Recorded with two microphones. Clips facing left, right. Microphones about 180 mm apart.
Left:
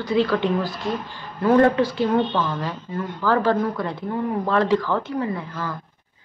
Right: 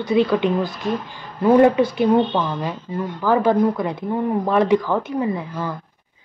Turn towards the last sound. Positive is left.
turn(degrees=-15)  # may be behind; listen again after turning